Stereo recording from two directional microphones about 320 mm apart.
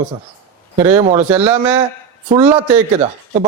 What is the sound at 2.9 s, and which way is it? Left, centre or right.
Speech, centre.